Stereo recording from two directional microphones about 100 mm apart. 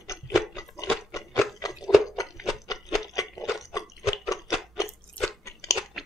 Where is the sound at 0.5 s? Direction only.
35° left (ahead or behind).